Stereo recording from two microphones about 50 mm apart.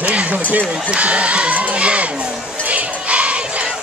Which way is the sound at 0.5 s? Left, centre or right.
Right.